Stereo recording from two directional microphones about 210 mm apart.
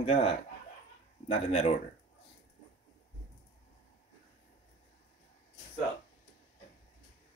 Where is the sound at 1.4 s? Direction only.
30° left (ahead or behind).